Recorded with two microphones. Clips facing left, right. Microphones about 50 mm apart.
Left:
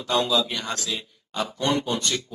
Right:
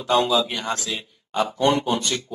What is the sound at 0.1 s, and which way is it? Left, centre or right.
Speech, centre.